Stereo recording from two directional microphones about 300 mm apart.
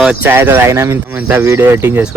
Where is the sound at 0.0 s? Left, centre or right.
Centre.